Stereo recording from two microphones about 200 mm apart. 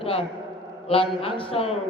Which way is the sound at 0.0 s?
30° left (ahead or behind).